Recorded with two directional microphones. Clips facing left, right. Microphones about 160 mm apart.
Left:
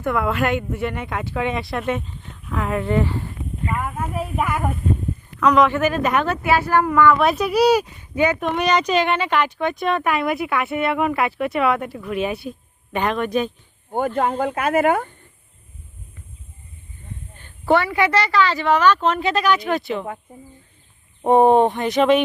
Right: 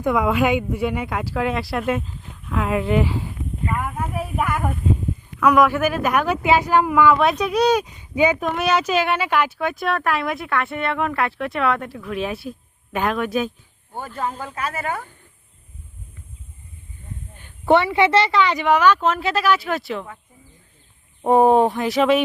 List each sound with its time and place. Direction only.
0.0 s speech: 15° right (ahead or behind)
6.2 s a woman's voice: 15° right (ahead or behind)
7.2 s speech: centre (ahead or behind)
8.1 s speech: 15° right (ahead or behind)
8.4 s speech: centre (ahead or behind)
14.2 s speech: 55° left (ahead or behind)
17.7 s a woman's voice: 25° right (ahead or behind); by 20.1 s centre (ahead or behind)
21.2 s speech: centre (ahead or behind)